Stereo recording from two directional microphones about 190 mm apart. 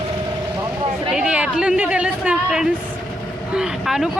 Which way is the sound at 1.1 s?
5° right (ahead or behind).